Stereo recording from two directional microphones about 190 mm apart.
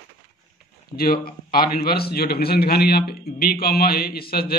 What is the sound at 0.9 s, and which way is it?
A man's voice, 50° left (ahead or behind).